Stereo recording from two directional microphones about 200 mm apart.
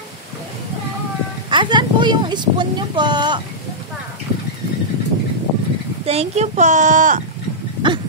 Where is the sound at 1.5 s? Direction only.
25° right (ahead or behind).